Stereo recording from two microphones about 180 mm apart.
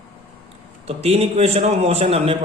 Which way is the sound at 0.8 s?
35° right (ahead or behind).